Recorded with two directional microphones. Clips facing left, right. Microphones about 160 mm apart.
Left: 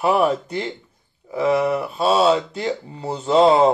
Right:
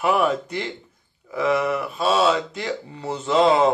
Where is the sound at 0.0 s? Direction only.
30° left (ahead or behind).